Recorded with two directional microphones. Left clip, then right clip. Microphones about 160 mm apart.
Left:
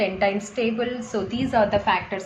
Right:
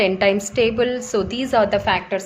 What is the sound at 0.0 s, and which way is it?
A woman's voice, 65° right (ahead or behind).